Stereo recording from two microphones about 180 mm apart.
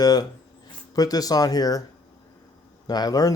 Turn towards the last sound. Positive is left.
turn(degrees=20)  # may be behind; listen again after turning